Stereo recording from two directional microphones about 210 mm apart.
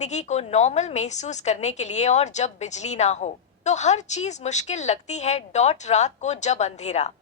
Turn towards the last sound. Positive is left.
turn(degrees=30)  # may be behind; listen again after turning